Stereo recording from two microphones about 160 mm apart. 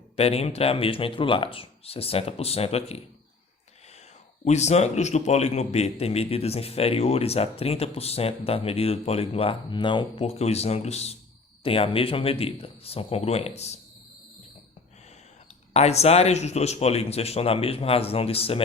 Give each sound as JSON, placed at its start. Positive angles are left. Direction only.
{"t": 0.2, "sound": "a man's voice", "side_deg": 40}
{"t": 4.4, "sound": "a man's voice", "side_deg": 45}
{"t": 15.7, "sound": "a man's voice", "side_deg": 40}